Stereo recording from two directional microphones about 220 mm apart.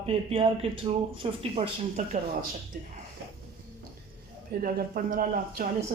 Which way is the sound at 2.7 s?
40° right (ahead or behind).